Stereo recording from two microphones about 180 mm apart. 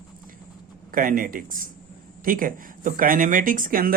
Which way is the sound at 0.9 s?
50° right (ahead or behind).